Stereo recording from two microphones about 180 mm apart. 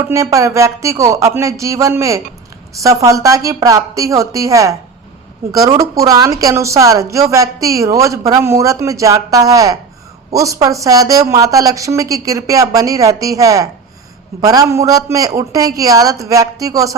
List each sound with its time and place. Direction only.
0.0 s speech: 15° right (ahead or behind)